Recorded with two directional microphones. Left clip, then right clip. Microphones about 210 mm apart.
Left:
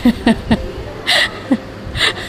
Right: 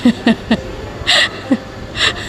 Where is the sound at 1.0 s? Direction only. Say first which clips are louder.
Right 2 dB; centre (ahead or behind).